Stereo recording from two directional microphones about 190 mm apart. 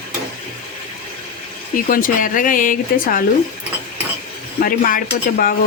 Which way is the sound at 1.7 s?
45° left (ahead or behind).